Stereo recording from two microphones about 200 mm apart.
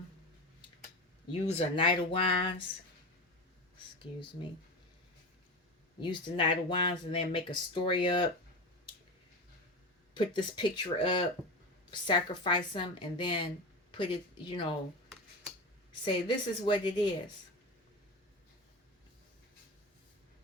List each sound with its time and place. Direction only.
1.3 s speech: 30° left (ahead or behind)
4.2 s speech: 25° left (ahead or behind)
6.0 s speech: 25° left (ahead or behind)
10.2 s speech: 25° left (ahead or behind)
16.0 s speech: 25° left (ahead or behind)